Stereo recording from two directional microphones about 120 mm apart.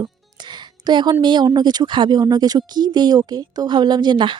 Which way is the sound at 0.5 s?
40° right (ahead or behind).